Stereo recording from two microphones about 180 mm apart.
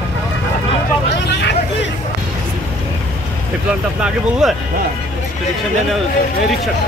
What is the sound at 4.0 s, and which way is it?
Speech, 5° right (ahead or behind).